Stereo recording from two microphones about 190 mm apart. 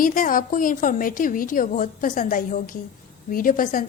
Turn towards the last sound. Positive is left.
turn(degrees=45)  # may be behind; listen again after turning